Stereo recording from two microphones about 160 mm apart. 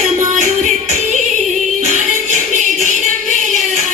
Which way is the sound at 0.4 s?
45° right (ahead or behind).